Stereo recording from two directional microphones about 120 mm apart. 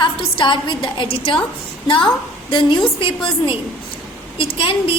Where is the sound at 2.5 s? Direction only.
45° left (ahead or behind).